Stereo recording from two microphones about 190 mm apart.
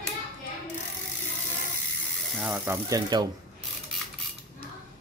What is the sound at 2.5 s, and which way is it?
Speech, 15° right (ahead or behind).